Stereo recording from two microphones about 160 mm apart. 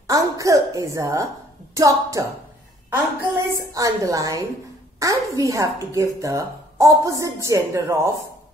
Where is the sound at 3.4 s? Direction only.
20° right (ahead or behind).